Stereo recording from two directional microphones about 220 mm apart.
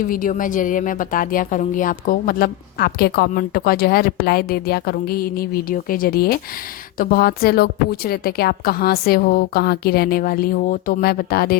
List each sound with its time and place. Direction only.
0.0 s a woman's voice: 40° left (ahead or behind)